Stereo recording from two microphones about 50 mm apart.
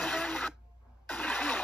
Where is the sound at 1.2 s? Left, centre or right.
Left.